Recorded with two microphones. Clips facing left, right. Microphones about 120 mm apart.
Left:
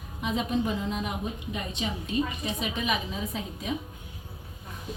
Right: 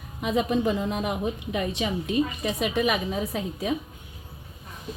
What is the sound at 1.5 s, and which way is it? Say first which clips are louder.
A woman's voice: right 7 dB; 70° right (ahead or behind).